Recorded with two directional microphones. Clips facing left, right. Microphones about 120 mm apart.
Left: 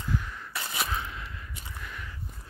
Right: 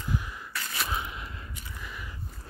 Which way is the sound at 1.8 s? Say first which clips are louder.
Right 1 dB; 5° right (ahead or behind).